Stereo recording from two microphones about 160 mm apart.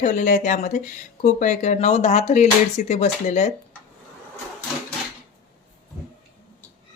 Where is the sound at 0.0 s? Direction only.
50° left (ahead or behind).